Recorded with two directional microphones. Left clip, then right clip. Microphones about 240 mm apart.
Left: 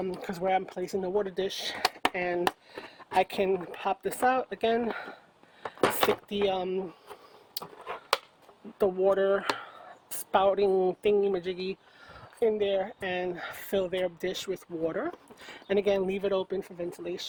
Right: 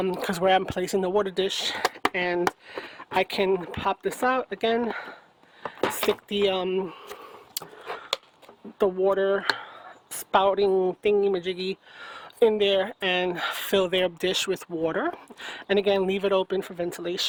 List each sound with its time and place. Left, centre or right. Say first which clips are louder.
0.0 s speech: right 7 dB; right; by 5.1 s centre
6.2 s a sound: right 4 dB; right
8.8 s speech: right 2 dB; centre; by 17.2 s right